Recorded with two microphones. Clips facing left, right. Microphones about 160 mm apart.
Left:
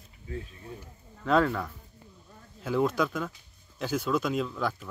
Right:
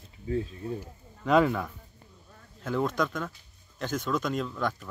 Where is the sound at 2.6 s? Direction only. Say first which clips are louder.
Left 2 dB; 5° left (ahead or behind).